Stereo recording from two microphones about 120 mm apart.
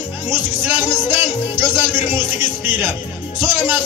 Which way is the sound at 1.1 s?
20° right (ahead or behind).